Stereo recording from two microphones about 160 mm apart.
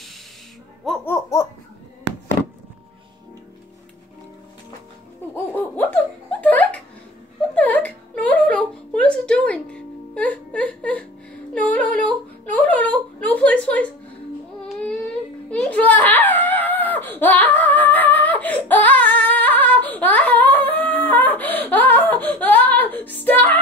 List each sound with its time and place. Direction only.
1.0 s laughter: 15° left (ahead or behind)
5.3 s music: 10° left (ahead or behind)
6.4 s a sound: 10° left (ahead or behind)
7.5 s whimper: 10° left (ahead or behind)
14.7 s a sound: 5° left (ahead or behind)
15.5 s screaming: 10° left (ahead or behind)